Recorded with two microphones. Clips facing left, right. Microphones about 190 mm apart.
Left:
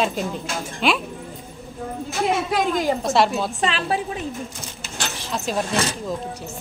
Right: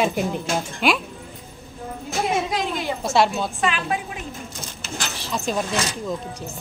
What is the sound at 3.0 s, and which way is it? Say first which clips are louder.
Speech: left 1 dB; centre (ahead or behind).